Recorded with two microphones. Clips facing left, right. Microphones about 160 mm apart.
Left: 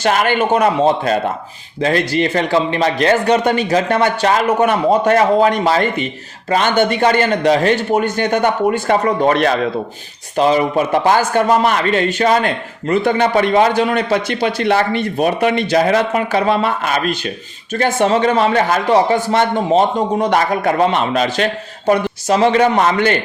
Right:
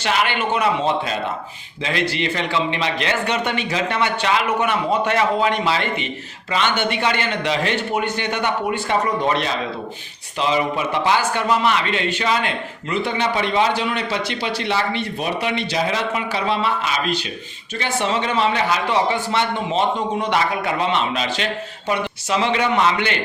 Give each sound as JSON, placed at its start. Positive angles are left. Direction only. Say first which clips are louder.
{"t": 0.0, "sound": "a man's voice", "louder": "left 6 dB", "side_deg": 45}
{"t": 10.3, "sound": "a man's voice", "louder": "left 7 dB", "side_deg": 45}